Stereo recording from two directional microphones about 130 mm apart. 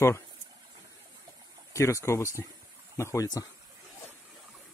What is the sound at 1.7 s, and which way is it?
Speech, 20° left (ahead or behind).